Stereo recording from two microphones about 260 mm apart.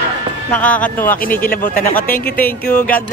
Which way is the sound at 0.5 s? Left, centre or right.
Centre.